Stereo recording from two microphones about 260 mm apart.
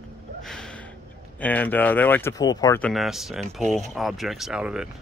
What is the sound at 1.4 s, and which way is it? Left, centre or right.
Speech, centre.